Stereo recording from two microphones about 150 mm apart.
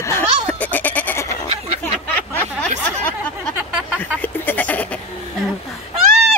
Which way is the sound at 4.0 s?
10° left (ahead or behind).